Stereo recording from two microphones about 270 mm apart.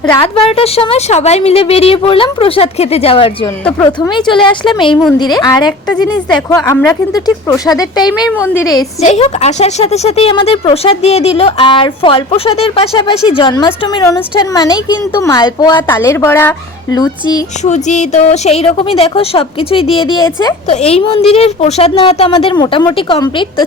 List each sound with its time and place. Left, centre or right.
0.2 s a woman's voice: left
3.6 s speech: centre
3.8 s a woman's voice: centre
6.0 s a woman's voice: centre
17.6 s a woman's voice: left